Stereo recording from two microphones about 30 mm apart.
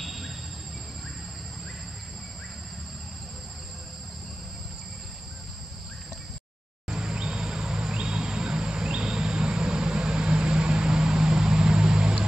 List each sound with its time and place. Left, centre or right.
0.0 s cricket: centre
6.9 s vehicle: right
7.2 s insect: right